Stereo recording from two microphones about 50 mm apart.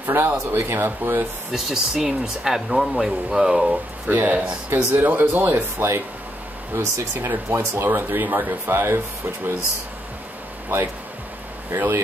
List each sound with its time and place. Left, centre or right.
0.0 s speech: right
0.5 s speech: right
1.5 s speech: centre
4.1 s speech: right
10.7 s speech: right
11.7 s speech: right